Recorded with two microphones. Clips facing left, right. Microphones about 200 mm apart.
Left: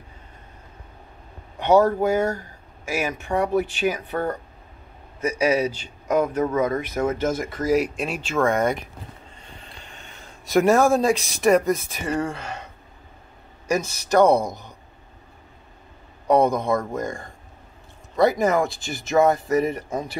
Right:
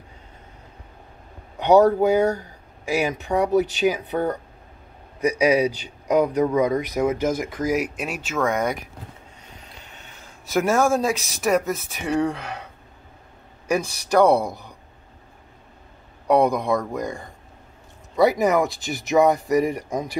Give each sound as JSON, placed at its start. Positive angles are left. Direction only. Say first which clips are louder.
{"t": 1.6, "sound": "speech", "louder": "right 2 dB", "side_deg": -15}
{"t": 9.4, "sound": "a sound", "louder": "left 1 dB", "side_deg": -5}
{"t": 11.3, "sound": "speech", "louder": "left 4 dB", "side_deg": 0}
{"t": 13.7, "sound": "speech", "louder": "even", "side_deg": -10}
{"t": 14.3, "sound": "speech", "louder": "even", "side_deg": 15}
{"t": 16.4, "sound": "speech", "louder": "even", "side_deg": -15}
{"t": 18.3, "sound": "speech", "louder": "right 1 dB", "side_deg": -15}
{"t": 18.7, "sound": "speech", "louder": "right 3 dB", "side_deg": 0}
{"t": 19.0, "sound": "speech", "louder": "right 1 dB", "side_deg": -15}